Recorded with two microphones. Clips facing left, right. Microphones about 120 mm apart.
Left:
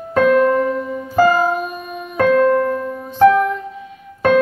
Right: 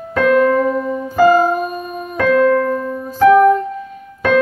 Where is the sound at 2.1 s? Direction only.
40° left (ahead or behind).